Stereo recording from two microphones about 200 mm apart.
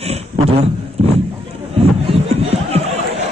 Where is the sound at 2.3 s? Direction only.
30° right (ahead or behind).